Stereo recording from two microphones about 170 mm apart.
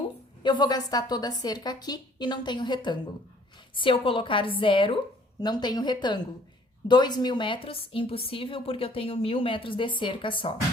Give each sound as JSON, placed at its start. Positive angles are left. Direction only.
{"t": 0.4, "sound": "a woman's voice", "side_deg": 25}